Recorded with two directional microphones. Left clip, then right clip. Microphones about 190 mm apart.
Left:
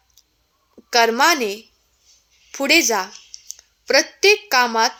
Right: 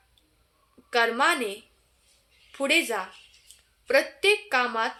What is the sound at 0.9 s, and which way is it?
A woman's voice, 50° left (ahead or behind).